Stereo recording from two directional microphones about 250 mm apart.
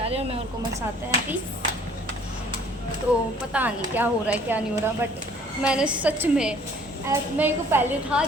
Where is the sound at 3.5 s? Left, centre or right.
Centre.